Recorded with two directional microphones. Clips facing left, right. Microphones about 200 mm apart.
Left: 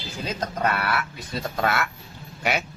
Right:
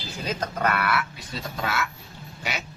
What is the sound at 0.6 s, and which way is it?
Speech, 30° left (ahead or behind).